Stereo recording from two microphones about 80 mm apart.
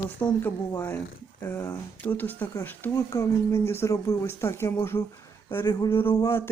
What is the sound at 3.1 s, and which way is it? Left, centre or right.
Speech, left.